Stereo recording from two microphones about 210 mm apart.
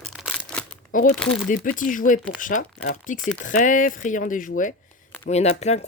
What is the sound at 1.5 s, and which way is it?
Speech, 40° left (ahead or behind).